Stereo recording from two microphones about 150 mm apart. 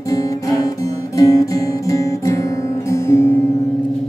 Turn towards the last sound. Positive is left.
turn(degrees=15)  # may be behind; listen again after turning